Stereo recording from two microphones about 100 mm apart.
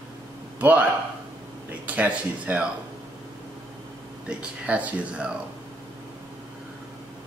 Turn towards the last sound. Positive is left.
turn(degrees=-10)  # may be behind; listen again after turning